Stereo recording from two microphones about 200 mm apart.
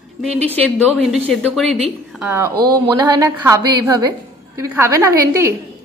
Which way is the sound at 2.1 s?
5° right (ahead or behind).